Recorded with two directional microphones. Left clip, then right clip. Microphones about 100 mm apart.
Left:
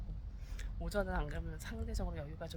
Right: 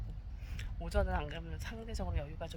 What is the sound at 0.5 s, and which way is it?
Speech, 25° left (ahead or behind).